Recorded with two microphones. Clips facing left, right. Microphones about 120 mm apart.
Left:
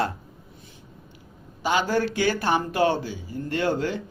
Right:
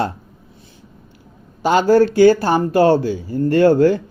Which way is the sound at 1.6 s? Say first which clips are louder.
Right 10 dB; 45° right (ahead or behind).